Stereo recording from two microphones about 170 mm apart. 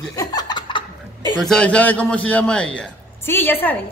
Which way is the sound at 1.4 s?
5° left (ahead or behind).